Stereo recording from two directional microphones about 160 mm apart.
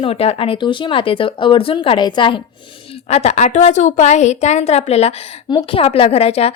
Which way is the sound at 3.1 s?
40° left (ahead or behind).